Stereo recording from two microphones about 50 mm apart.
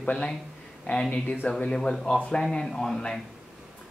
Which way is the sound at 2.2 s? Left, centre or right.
Centre.